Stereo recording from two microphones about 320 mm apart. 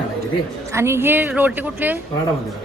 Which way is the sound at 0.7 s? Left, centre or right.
Centre.